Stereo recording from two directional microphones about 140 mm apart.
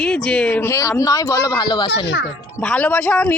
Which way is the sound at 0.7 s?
20° left (ahead or behind).